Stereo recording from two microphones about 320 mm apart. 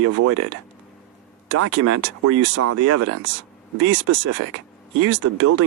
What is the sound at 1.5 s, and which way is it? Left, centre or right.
Speech, right.